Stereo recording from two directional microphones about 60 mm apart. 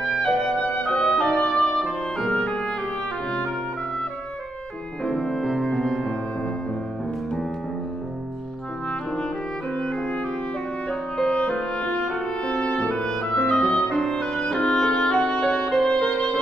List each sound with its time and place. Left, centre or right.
0.1 s music: centre
1.8 s clarinet: centre
5.0 s music: centre
9.8 s clarinet: centre
10.9 s music: centre
13.2 s clarinet: centre
13.5 s clarinet: centre
13.8 s music: centre